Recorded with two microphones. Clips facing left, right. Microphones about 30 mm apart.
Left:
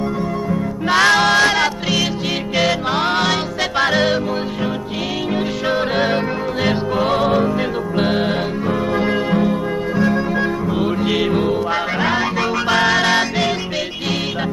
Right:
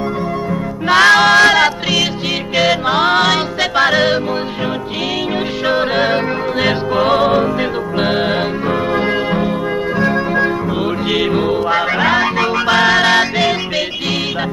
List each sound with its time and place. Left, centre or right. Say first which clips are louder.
0.5 s music: right 3 dB; right
3.0 s music: right 6 dB; right
5.7 s music: right 4 dB; right